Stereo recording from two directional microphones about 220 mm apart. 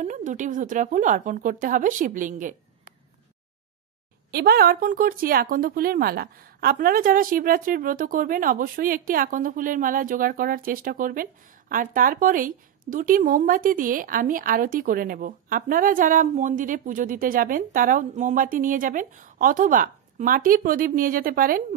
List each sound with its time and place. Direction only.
0.0 s a woman's voice: 35° right (ahead or behind)
4.3 s a woman's voice: 45° right (ahead or behind)